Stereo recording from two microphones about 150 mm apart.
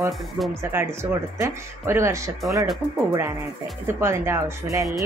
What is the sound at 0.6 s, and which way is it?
Speech, 15° right (ahead or behind).